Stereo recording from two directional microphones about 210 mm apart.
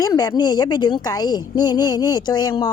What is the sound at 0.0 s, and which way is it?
A woman's voice, 15° left (ahead or behind).